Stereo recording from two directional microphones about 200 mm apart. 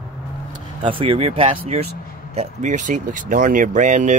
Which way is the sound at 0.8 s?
25° right (ahead or behind).